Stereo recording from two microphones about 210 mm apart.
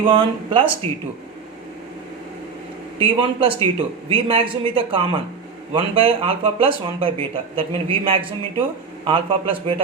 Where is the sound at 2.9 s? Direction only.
25° right (ahead or behind).